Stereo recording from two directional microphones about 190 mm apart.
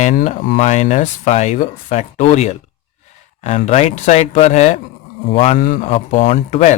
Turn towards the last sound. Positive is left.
turn(degrees=35)  # may be behind; listen again after turning